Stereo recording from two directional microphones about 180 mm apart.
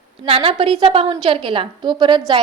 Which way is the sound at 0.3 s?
30° right (ahead or behind).